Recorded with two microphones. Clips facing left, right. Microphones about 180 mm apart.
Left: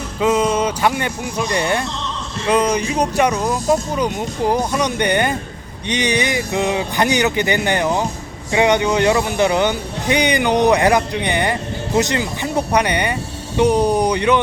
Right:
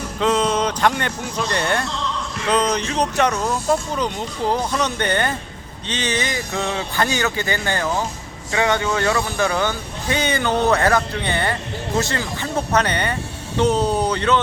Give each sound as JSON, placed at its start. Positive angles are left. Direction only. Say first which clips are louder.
{"t": 0.2, "sound": "speech", "louder": "left 3 dB", "side_deg": 10}